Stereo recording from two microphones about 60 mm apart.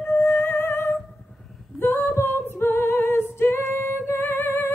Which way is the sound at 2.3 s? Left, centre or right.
Left.